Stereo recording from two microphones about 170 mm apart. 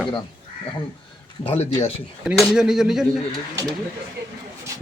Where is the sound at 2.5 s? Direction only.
5° right (ahead or behind).